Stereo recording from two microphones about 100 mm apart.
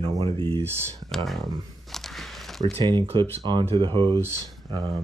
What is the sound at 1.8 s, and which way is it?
Walk, 5° left (ahead or behind).